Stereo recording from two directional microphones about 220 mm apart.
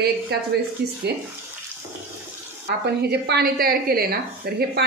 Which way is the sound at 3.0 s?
50° right (ahead or behind).